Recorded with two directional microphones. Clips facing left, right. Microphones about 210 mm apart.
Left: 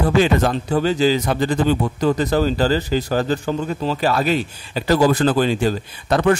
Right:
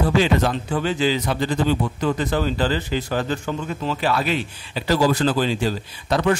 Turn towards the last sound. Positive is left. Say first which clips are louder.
# left 3 dB
turn(degrees=50)  # may be behind; listen again after turning